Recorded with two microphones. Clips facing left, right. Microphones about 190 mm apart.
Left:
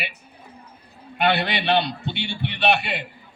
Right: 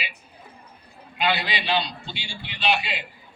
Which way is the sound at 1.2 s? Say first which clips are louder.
Left 4 dB; 60° left (ahead or behind).